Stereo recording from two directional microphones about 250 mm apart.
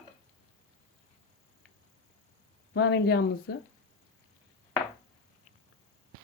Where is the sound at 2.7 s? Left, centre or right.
Left.